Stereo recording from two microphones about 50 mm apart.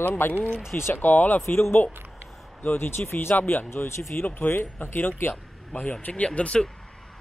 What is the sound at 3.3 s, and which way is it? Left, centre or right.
Speech, left.